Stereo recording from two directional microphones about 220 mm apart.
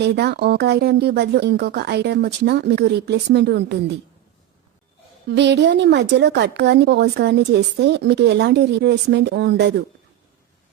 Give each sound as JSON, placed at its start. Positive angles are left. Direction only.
{"t": 0.0, "sound": "speech", "side_deg": -50}
{"t": 5.3, "sound": "speech", "side_deg": -50}